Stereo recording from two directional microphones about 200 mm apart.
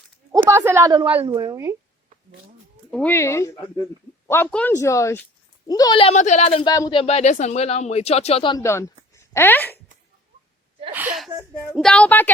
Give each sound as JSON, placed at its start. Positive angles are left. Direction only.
{"t": 0.5, "sound": "a woman's voice", "side_deg": -10}
{"t": 2.9, "sound": "speech", "side_deg": 10}
{"t": 7.0, "sound": "speech", "side_deg": 35}
{"t": 9.1, "sound": "a sound", "side_deg": 10}
{"t": 10.9, "sound": "a woman's voice", "side_deg": -5}